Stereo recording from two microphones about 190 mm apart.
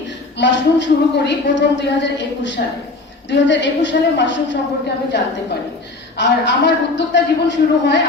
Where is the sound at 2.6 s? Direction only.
55° left (ahead or behind).